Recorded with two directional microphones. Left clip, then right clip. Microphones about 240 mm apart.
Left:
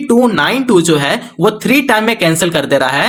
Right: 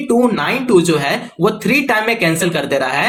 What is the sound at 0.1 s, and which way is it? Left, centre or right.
Speech, left.